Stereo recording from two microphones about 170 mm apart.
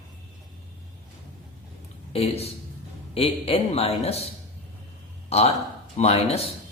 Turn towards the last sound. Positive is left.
turn(degrees=35)  # may be behind; listen again after turning